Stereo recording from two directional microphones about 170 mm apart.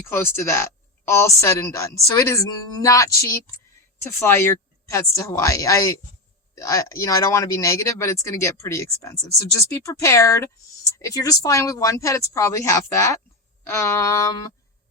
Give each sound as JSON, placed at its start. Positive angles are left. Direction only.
{"t": 0.1, "sound": "a woman's voice", "side_deg": 15}